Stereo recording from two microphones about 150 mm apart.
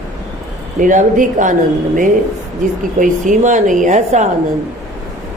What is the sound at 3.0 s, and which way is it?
Speech, 60° right (ahead or behind).